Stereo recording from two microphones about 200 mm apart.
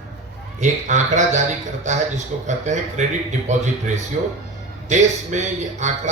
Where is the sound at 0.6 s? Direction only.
35° right (ahead or behind).